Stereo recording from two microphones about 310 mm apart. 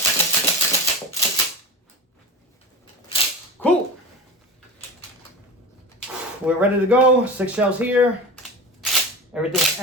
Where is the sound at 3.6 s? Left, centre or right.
Centre.